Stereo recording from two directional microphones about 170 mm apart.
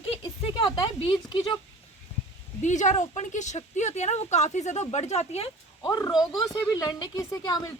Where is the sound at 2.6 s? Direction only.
45° left (ahead or behind).